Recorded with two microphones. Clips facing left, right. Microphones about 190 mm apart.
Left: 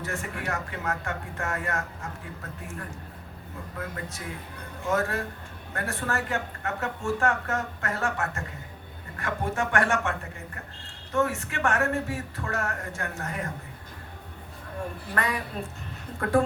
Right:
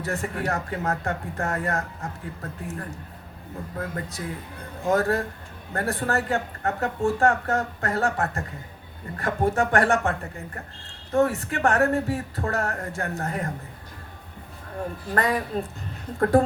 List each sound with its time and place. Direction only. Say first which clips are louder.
0.0 s speech: right 5 dB; 35° right (ahead or behind)
3.8 s speech: right 4 dB; 35° right (ahead or behind)
15.1 s speech: right 6 dB; 35° right (ahead or behind)